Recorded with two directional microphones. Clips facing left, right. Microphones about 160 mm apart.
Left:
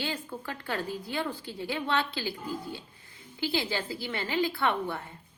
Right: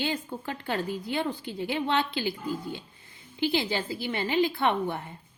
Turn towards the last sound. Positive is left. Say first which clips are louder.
# right 3 dB
turn(degrees=-20)  # may be behind; listen again after turning